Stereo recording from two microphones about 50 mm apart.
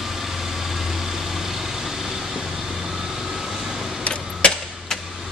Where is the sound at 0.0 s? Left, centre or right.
Centre.